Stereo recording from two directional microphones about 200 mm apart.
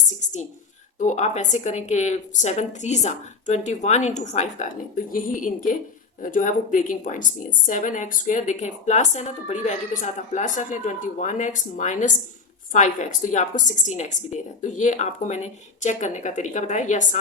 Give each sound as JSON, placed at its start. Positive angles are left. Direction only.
{"t": 0.9, "sound": "a woman's voice", "side_deg": 35}